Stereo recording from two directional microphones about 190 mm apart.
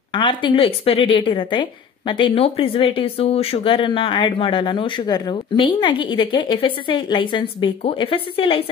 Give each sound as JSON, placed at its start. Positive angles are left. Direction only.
{"t": 0.1, "sound": "a woman's voice", "side_deg": 25}